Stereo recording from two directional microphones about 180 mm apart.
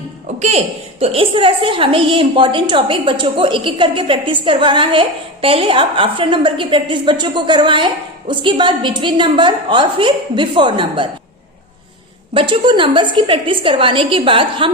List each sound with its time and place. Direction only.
0.3 s a woman's voice: 35° right (ahead or behind)
12.3 s a woman's voice: 30° right (ahead or behind)